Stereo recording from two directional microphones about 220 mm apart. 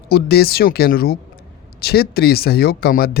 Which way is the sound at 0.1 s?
45° left (ahead or behind).